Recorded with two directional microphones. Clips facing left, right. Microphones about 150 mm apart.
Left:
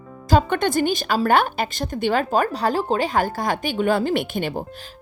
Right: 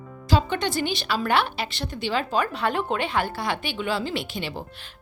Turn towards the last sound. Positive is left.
turn(degrees=50)  # may be behind; listen again after turning